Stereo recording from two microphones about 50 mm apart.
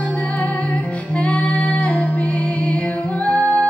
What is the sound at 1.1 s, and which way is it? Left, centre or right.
Music, left.